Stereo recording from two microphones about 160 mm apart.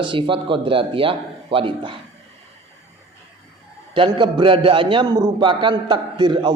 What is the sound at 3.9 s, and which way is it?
A man's voice, 30° right (ahead or behind).